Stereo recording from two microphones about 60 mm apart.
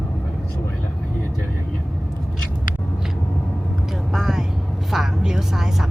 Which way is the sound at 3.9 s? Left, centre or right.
Centre.